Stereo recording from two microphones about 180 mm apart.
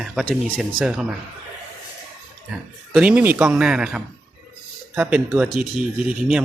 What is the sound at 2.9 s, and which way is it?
Speech, 5° right (ahead or behind).